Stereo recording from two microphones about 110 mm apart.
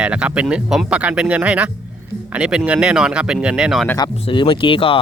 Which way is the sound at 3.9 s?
45° left (ahead or behind).